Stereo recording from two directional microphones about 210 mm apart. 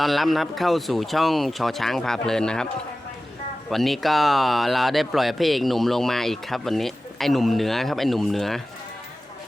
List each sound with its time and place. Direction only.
0.0 s speech: centre (ahead or behind)
3.7 s speech: centre (ahead or behind)